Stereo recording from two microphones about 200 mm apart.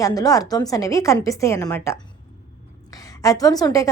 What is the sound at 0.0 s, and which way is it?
A woman's voice, 20° left (ahead or behind).